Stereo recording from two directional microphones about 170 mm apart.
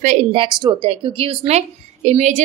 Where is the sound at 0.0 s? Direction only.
40° right (ahead or behind).